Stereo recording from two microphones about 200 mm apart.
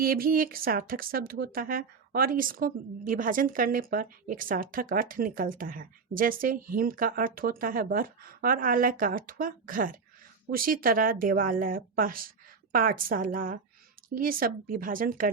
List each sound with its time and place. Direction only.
0.0 s speech: 45° right (ahead or behind)